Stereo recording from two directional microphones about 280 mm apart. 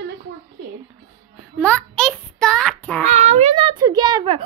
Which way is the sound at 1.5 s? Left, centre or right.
Centre.